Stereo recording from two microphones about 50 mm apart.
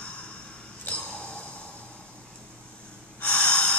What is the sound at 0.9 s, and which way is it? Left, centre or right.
Snort, centre.